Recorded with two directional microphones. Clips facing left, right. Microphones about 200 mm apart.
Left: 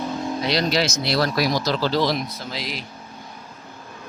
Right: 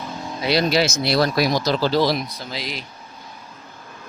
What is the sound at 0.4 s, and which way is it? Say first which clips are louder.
Speech: right 4 dB; 10° right (ahead or behind).